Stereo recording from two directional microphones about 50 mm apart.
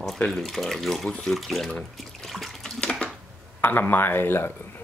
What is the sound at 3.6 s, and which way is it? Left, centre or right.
Speech, left.